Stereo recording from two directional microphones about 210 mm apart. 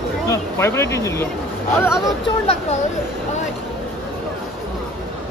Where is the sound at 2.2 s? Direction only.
25° left (ahead or behind).